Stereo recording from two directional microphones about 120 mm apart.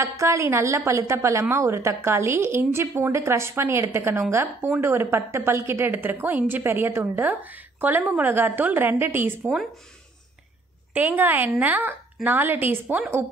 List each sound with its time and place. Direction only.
0.0 s a woman's voice: 25° right (ahead or behind)
10.9 s a woman's voice: 15° right (ahead or behind)